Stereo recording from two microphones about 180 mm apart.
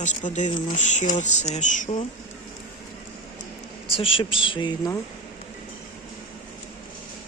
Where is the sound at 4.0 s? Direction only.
30° left (ahead or behind).